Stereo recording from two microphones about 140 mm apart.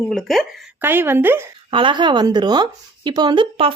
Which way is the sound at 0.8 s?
15° right (ahead or behind).